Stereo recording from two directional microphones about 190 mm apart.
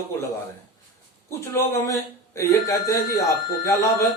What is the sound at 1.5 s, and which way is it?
Speech, 15° left (ahead or behind).